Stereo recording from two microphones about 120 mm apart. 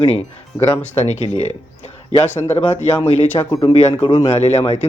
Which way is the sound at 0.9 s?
65° left (ahead or behind).